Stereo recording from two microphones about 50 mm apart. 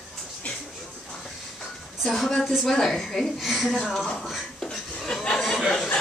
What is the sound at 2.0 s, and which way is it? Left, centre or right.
A woman's voice, centre.